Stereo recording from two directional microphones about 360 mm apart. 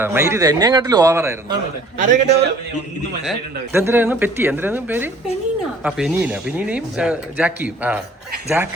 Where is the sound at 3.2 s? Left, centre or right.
Centre.